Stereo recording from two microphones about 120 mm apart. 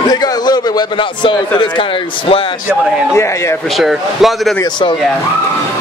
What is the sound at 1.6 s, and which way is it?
Speech, 45° left (ahead or behind).